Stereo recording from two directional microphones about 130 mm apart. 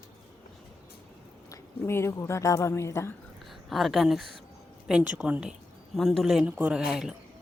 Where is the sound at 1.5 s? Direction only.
20° left (ahead or behind).